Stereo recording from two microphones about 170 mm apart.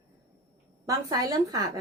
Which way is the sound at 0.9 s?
20° right (ahead or behind).